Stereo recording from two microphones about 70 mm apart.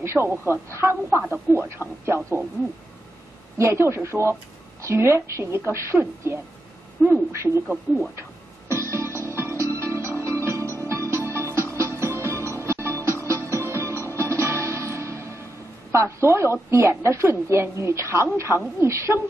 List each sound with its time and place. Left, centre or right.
0.0 s a woman's voice: right
3.5 s a woman's voice: right
8.2 s music: right
15.9 s a woman's voice: right